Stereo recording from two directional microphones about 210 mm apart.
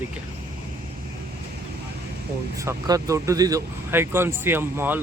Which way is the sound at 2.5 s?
15° right (ahead or behind).